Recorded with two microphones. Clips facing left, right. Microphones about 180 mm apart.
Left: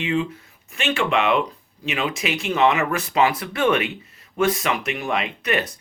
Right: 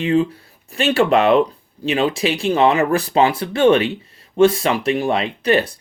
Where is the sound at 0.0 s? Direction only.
40° right (ahead or behind).